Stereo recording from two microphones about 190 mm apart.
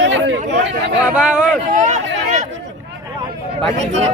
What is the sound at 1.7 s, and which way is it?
Speech, 40° right (ahead or behind).